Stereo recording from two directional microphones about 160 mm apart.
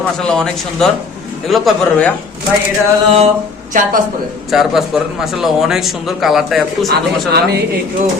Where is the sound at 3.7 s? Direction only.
55° right (ahead or behind).